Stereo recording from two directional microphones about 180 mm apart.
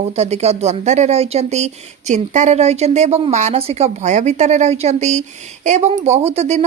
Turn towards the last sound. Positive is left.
turn(degrees=-35)  # may be behind; listen again after turning